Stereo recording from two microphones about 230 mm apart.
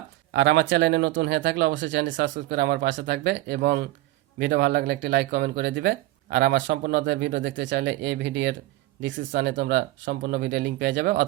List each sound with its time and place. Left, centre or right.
0.3 s speech: right